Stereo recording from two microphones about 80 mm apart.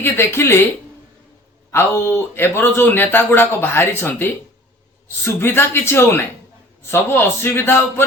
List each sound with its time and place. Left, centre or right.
0.0 s speech: left
1.7 s a man's voice: left